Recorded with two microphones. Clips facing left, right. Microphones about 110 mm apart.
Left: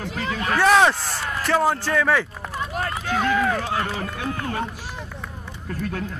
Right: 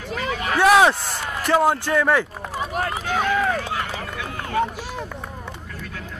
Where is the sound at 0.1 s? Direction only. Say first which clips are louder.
Right 6 dB; 45° right (ahead or behind).